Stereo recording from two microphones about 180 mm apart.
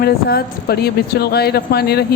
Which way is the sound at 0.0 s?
60° left (ahead or behind).